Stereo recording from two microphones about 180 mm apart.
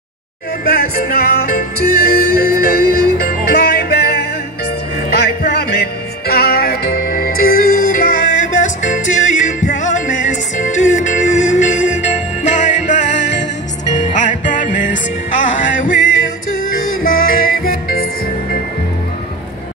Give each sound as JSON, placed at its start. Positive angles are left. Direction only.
{"t": 0.7, "sound": "music", "side_deg": 55}
{"t": 13.2, "sound": "music", "side_deg": 75}
{"t": 14.1, "sound": "music", "side_deg": 45}
{"t": 17.0, "sound": "music", "side_deg": 55}